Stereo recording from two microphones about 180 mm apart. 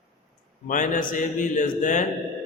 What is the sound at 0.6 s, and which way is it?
A man's voice, 45° left (ahead or behind).